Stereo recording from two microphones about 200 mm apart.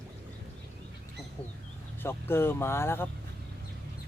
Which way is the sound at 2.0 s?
10° left (ahead or behind).